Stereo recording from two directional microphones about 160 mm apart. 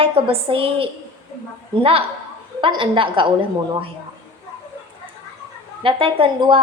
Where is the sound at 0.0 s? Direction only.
35° right (ahead or behind).